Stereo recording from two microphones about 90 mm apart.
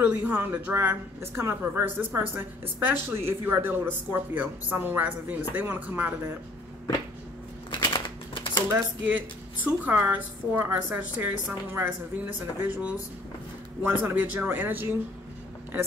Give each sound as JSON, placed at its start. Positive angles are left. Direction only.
{"t": 0.0, "sound": "a woman's voice", "side_deg": -20}
{"t": 7.7, "sound": "a sound", "side_deg": 65}
{"t": 9.0, "sound": "a woman's voice", "side_deg": -20}